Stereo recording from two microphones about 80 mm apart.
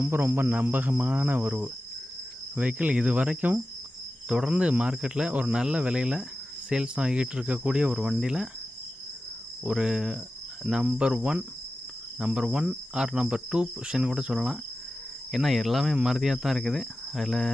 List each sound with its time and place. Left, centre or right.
0.0 s cricket: right; by 8.4 s centre
9.6 s cricket: centre
15.3 s speech: centre